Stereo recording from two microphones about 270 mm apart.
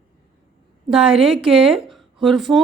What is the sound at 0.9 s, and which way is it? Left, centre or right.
Speech, centre.